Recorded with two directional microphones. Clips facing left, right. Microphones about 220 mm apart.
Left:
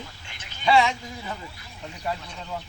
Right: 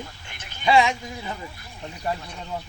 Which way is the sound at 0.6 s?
15° right (ahead or behind).